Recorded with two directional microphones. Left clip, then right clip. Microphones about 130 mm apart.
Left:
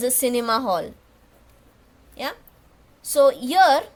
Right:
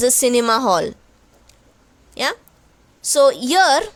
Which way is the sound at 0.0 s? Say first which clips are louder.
Right 7 dB; 50° right (ahead or behind).